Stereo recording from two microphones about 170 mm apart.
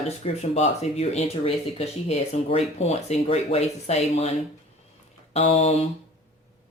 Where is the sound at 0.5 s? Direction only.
40° left (ahead or behind).